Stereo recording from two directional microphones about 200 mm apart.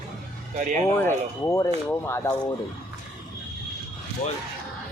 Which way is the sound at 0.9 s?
15° left (ahead or behind).